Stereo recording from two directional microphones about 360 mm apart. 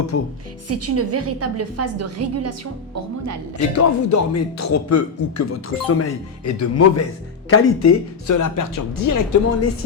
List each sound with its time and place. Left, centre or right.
0.1 s speech: left
0.7 s a woman's voice: right
3.8 s speech: left